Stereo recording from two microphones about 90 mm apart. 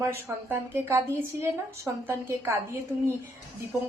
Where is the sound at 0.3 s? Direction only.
30° right (ahead or behind).